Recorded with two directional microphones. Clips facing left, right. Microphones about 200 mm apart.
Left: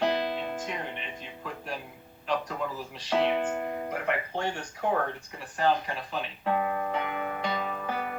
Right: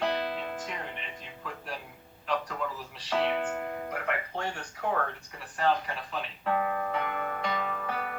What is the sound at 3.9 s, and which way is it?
Speech, 25° left (ahead or behind).